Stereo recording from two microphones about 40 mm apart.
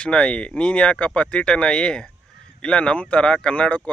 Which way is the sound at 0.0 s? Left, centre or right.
Left.